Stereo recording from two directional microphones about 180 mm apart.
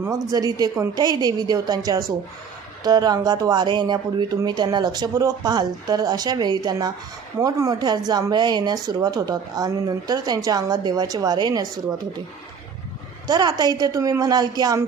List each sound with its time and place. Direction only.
0.0 s speech: 20° right (ahead or behind)
13.2 s speech: 20° right (ahead or behind)